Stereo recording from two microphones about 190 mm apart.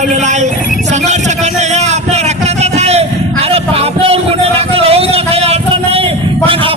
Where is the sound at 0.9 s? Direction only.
35° right (ahead or behind).